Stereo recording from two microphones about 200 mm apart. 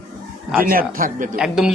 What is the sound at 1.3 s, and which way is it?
Speech, 5° right (ahead or behind).